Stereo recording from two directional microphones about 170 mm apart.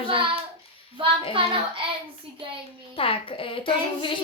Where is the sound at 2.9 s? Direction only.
35° left (ahead or behind).